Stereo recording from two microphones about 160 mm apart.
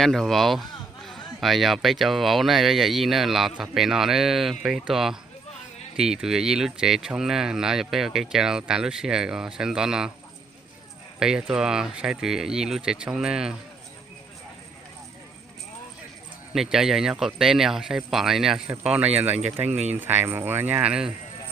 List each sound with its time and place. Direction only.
0.0 s speech: centre (ahead or behind)
11.2 s speech: 5° right (ahead or behind)
16.5 s speech: 5° right (ahead or behind)
19.7 s speech: 45° right (ahead or behind)
20.0 s speech: 10° right (ahead or behind)